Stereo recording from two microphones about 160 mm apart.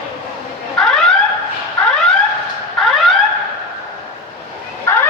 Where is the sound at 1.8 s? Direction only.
5° left (ahead or behind).